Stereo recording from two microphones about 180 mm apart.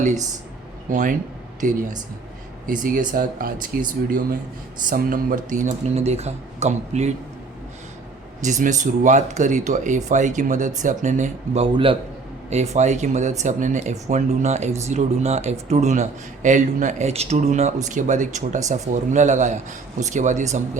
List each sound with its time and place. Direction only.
0.9 s speech: 45° right (ahead or behind)
8.4 s speech: 40° right (ahead or behind)